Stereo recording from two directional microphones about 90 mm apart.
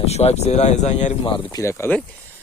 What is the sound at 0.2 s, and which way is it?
Speech, 70° left (ahead or behind).